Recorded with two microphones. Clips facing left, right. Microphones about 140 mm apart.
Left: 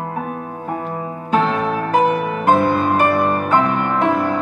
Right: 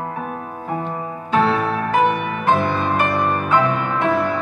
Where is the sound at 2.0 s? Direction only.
35° left (ahead or behind).